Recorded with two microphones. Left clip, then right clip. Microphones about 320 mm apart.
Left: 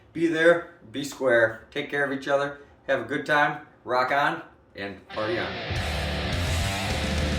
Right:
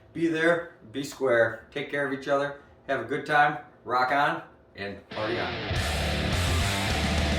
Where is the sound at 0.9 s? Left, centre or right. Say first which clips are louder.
Left 2 dB; centre.